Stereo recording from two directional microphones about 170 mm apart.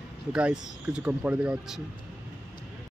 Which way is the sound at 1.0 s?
10° right (ahead or behind).